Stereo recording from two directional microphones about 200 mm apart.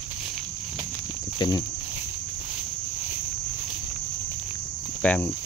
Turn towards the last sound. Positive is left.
turn(degrees=10)  # may be behind; listen again after turning